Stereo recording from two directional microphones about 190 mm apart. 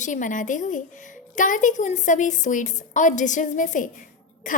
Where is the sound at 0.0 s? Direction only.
40° left (ahead or behind).